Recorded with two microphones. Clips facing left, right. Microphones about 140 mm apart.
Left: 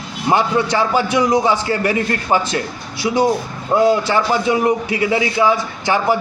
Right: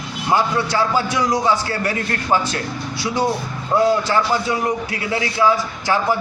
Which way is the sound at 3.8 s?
20° left (ahead or behind).